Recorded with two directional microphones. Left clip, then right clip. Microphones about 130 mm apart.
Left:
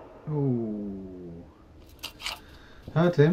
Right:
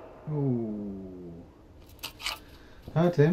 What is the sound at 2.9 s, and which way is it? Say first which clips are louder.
Speech: left 2 dB; 10° right (ahead or behind).